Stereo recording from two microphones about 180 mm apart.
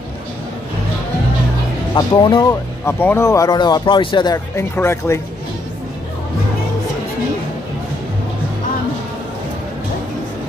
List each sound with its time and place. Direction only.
2.0 s speech: 25° left (ahead or behind)
2.8 s speech: 10° left (ahead or behind)